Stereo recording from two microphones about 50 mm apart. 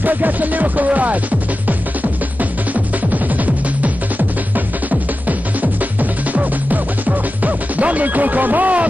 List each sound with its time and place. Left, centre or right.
0.0 s music: right
5.6 s music: right